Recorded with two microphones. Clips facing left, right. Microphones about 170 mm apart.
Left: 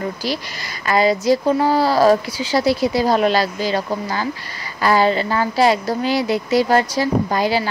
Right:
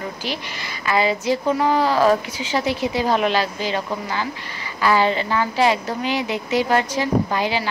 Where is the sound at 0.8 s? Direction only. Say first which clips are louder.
Left 4 dB; 40° left (ahead or behind).